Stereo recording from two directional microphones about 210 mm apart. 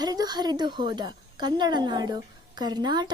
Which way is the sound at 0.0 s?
20° right (ahead or behind).